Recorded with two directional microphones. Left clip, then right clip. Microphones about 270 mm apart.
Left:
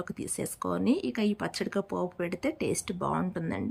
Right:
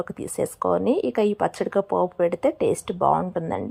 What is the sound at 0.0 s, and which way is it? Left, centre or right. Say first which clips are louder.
Speech: right 9 dB; centre.